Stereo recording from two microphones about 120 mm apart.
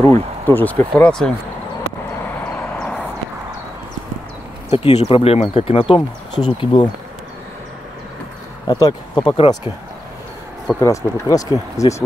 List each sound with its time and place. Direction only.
0.0 s speech: 20° left (ahead or behind)
4.6 s speech: 60° left (ahead or behind); by 6.9 s 40° left (ahead or behind)
8.6 s speech: 35° left (ahead or behind)
10.8 s speech: 25° left (ahead or behind)